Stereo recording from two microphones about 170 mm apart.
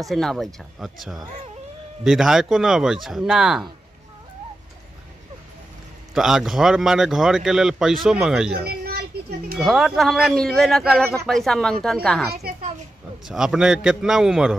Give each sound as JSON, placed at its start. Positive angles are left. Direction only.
{"t": 0.0, "sound": "speech", "side_deg": 0}
{"t": 6.1, "sound": "speech", "side_deg": 0}
{"t": 8.6, "sound": "a sound", "side_deg": -65}
{"t": 9.6, "sound": "speech", "side_deg": 0}